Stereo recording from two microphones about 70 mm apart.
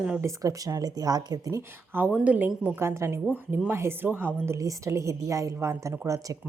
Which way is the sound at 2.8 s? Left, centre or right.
Right.